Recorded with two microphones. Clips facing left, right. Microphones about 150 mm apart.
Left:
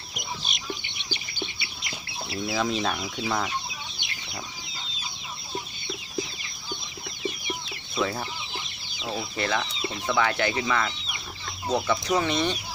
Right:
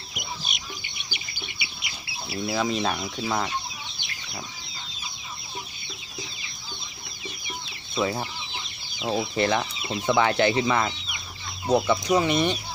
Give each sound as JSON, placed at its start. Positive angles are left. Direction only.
{"t": 0.2, "sound": "chicken", "side_deg": 0}
{"t": 1.5, "sound": "speech", "side_deg": -10}
{"t": 8.0, "sound": "chicken", "side_deg": -15}
{"t": 9.0, "sound": "speech", "side_deg": -25}
{"t": 11.7, "sound": "chicken", "side_deg": -15}